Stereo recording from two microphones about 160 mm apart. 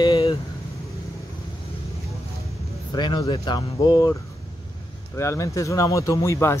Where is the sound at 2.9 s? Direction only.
25° left (ahead or behind).